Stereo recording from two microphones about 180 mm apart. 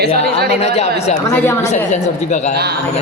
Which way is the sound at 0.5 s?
35° left (ahead or behind).